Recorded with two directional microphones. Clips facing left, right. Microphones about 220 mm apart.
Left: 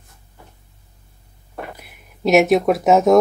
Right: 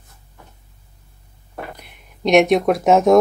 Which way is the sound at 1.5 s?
5° left (ahead or behind).